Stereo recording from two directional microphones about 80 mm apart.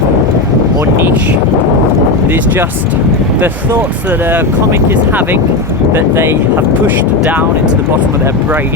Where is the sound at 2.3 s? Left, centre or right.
Right.